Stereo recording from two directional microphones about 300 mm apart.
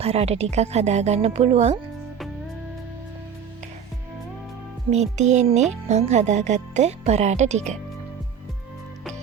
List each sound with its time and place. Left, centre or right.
0.0 s speech: right
4.9 s speech: right